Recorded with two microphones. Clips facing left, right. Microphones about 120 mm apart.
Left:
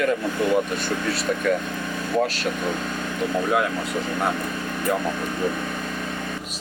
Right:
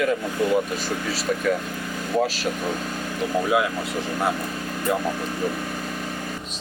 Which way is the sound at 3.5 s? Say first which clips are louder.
Right 1 dB; 5° right (ahead or behind).